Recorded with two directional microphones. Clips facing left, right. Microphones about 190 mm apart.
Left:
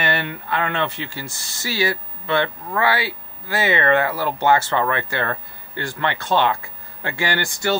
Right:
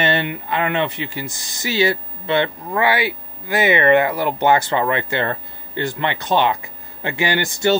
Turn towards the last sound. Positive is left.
turn(degrees=-20)  # may be behind; listen again after turning